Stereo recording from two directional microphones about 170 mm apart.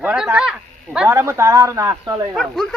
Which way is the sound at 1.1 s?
15° right (ahead or behind).